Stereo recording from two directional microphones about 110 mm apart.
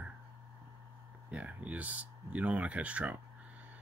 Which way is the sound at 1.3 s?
10° right (ahead or behind).